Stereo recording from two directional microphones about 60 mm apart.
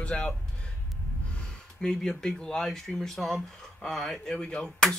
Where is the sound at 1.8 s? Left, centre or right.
Centre.